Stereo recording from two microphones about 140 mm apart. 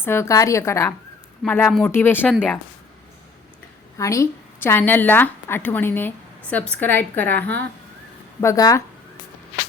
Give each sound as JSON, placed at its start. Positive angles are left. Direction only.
{"t": 0.0, "sound": "a woman's voice", "side_deg": 15}
{"t": 3.9, "sound": "a woman's voice", "side_deg": 20}
{"t": 8.4, "sound": "a woman's voice", "side_deg": 25}